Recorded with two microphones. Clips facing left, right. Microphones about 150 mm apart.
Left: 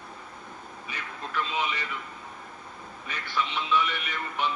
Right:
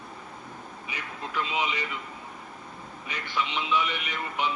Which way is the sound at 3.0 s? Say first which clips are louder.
Even; 15° right (ahead or behind).